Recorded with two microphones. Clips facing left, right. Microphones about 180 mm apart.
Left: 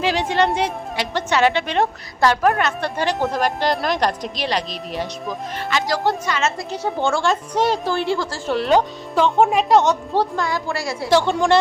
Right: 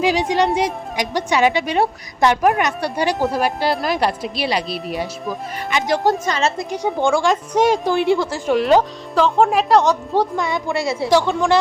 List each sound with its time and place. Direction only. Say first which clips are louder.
0.0 s a woman's voice: right 2 dB; 10° right (ahead or behind)
6.1 s a woman's voice: right 3 dB; 40° right (ahead or behind)
6.6 s a woman's voice: right 3 dB; 15° right (ahead or behind)
10.2 s a woman's voice: right 2 dB; 20° right (ahead or behind)
11.3 s speech: even; centre (ahead or behind)